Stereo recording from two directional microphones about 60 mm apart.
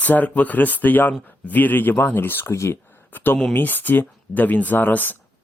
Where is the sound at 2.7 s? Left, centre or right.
Left.